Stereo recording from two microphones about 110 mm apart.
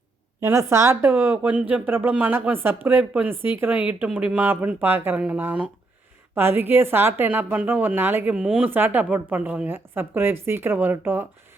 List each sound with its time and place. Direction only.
0.4 s a woman's voice: 25° right (ahead or behind); by 8.6 s 5° right (ahead or behind)
8.6 s a woman's voice: 20° right (ahead or behind)